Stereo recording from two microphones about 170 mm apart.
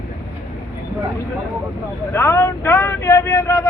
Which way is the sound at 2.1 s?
15° left (ahead or behind).